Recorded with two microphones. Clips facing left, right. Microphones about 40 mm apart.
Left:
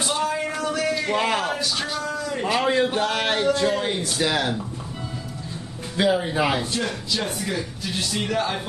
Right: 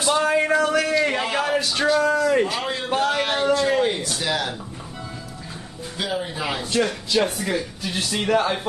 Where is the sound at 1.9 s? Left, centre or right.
Right.